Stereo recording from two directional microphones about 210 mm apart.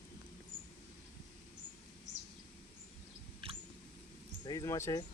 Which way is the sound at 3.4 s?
25° right (ahead or behind).